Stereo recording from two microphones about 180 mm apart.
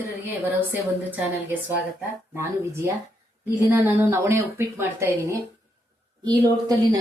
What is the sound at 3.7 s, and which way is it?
A woman's voice, 15° right (ahead or behind).